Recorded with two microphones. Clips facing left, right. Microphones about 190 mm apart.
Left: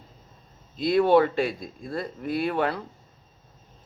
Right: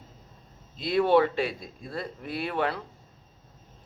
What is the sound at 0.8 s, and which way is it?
A man's voice, 45° left (ahead or behind).